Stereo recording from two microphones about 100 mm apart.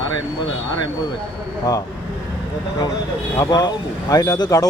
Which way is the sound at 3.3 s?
40° left (ahead or behind).